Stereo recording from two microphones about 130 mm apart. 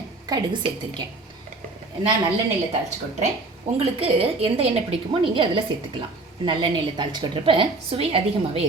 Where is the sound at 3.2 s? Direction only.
55° right (ahead or behind).